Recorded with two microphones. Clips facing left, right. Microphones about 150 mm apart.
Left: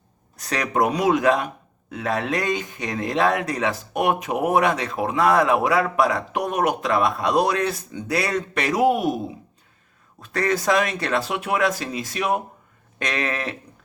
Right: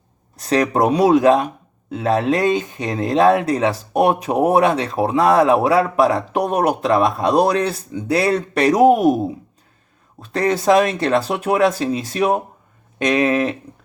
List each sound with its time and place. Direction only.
0.3 s speech: 30° right (ahead or behind); by 9.1 s 45° right (ahead or behind)
10.2 s speech: 25° right (ahead or behind)
13.0 s a sound: 20° right (ahead or behind)